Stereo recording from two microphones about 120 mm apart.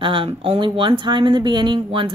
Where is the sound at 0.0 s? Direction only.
45° right (ahead or behind).